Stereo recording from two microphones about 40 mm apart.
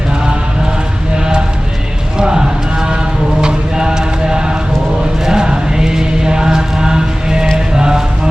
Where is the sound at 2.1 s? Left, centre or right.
Centre.